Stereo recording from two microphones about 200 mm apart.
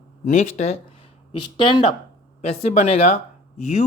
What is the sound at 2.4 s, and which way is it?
Speech, 35° left (ahead or behind).